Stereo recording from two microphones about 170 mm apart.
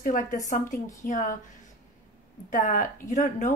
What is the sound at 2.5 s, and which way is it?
A woman's voice, 50° left (ahead or behind).